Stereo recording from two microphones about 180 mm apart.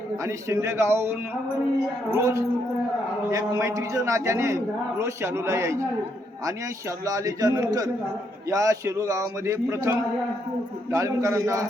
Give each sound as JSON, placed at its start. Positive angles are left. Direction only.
{"t": 0.3, "sound": "a man's voice", "side_deg": -15}
{"t": 2.1, "sound": "a man's voice", "side_deg": -15}
{"t": 7.0, "sound": "a man's voice", "side_deg": -20}